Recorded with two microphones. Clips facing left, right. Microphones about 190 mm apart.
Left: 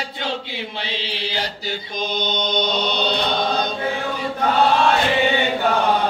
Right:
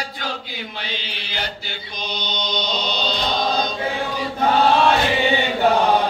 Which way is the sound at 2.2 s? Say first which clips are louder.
Left 3 dB; 50° left (ahead or behind).